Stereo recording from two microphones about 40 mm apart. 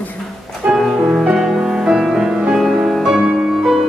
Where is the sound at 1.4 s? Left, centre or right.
Centre.